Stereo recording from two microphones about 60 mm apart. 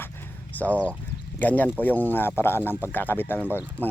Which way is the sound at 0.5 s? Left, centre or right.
Left.